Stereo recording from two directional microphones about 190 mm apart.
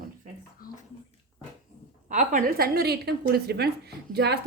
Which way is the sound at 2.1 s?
40° right (ahead or behind).